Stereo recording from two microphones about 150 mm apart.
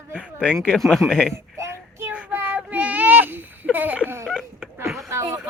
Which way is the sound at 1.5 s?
20° right (ahead or behind).